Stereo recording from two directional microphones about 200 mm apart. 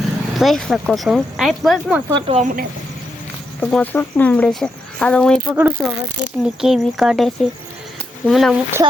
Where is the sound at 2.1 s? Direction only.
20° right (ahead or behind).